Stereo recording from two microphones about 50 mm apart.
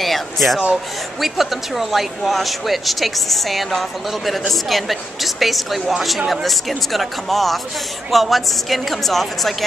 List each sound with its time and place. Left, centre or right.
0.0 s speech: centre